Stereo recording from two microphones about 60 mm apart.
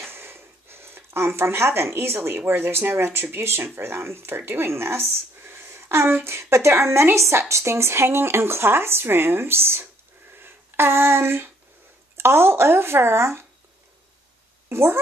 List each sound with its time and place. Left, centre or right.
0.0 s speech: right
10.3 s a sound: right
12.2 s speech: right
14.7 s a woman's voice: right